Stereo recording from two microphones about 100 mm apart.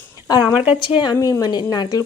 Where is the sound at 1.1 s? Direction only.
35° left (ahead or behind).